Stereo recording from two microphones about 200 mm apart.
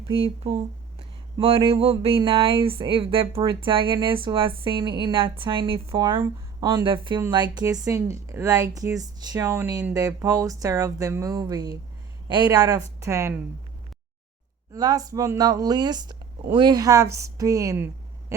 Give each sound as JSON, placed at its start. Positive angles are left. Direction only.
{"t": 0.0, "sound": "speech", "side_deg": -30}
{"t": 14.7, "sound": "speech", "side_deg": -20}
{"t": 18.3, "sound": "owl", "side_deg": -15}